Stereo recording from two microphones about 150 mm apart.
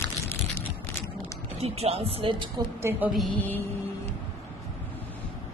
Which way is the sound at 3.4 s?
10° left (ahead or behind).